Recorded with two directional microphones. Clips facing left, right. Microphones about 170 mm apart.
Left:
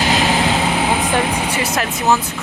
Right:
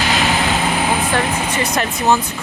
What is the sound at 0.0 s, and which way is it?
Vehicle, 35° left (ahead or behind).